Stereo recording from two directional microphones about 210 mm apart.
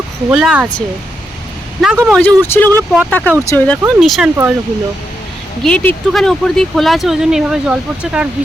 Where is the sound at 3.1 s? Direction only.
10° left (ahead or behind).